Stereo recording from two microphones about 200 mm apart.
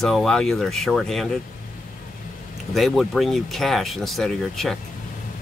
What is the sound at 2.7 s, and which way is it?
Speech, centre (ahead or behind).